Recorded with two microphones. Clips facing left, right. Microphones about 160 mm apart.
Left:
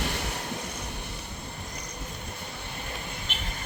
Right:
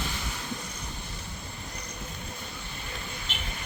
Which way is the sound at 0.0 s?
65° left (ahead or behind).